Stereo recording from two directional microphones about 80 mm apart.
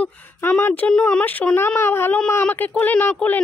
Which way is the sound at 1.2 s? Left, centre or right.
Left.